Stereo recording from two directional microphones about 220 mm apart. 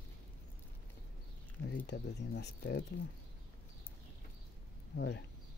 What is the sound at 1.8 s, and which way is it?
Speech, 50° left (ahead or behind).